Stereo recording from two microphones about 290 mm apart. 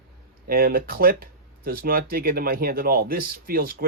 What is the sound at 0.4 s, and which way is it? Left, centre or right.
Speech, right.